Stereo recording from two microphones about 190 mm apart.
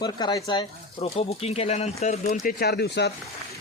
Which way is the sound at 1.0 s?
35° left (ahead or behind).